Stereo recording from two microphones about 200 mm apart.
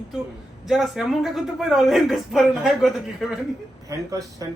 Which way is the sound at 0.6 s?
Centre (ahead or behind).